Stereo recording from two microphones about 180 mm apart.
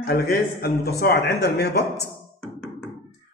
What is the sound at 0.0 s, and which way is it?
A woman's voice, 60° left (ahead or behind).